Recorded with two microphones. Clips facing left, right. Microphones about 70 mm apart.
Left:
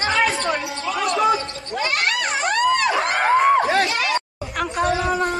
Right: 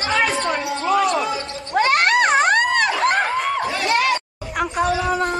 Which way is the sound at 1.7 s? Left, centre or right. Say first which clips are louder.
Right 7 dB; right.